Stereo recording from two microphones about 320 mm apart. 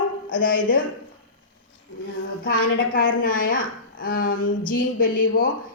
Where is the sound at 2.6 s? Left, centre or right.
Left.